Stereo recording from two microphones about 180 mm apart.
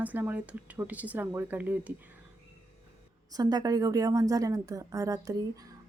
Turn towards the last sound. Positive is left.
turn(degrees=-20)  # may be behind; listen again after turning